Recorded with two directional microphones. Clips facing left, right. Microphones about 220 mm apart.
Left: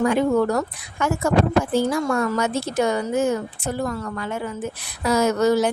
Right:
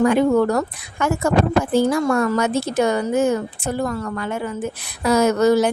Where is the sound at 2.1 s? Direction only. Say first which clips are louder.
Right 3 dB; 60° right (ahead or behind).